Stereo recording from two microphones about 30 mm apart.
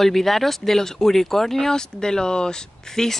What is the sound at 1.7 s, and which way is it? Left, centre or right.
Speech, left.